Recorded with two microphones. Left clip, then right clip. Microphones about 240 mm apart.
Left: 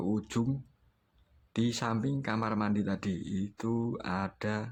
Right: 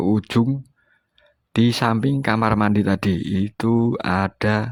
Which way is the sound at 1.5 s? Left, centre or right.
Right.